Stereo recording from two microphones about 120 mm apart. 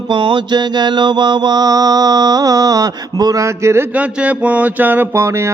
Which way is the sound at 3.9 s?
10° right (ahead or behind).